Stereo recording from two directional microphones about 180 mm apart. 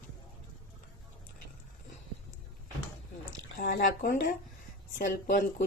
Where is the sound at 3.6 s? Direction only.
60° left (ahead or behind).